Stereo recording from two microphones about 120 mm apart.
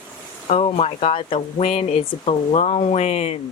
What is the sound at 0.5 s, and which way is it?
Speech, 65° left (ahead or behind).